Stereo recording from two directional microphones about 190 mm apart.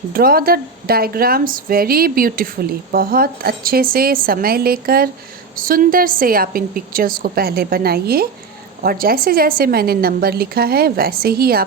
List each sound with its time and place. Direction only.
0.1 s speech: 50° right (ahead or behind)